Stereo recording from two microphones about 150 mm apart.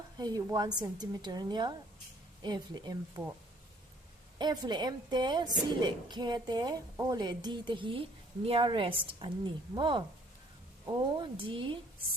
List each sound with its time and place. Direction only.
0.2 s a woman's voice: 25° right (ahead or behind)
4.4 s a woman's voice: 30° right (ahead or behind)